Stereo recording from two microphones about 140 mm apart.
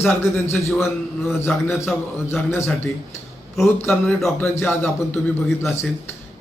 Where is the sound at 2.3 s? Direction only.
20° left (ahead or behind).